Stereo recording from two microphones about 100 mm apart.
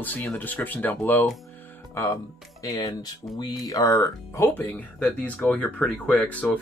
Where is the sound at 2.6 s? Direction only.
40° left (ahead or behind); by 6.6 s 15° left (ahead or behind).